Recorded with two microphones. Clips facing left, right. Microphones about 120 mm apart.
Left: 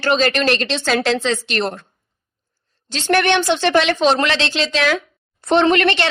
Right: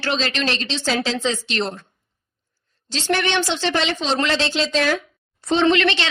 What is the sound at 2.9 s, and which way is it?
Speech, 55° left (ahead or behind).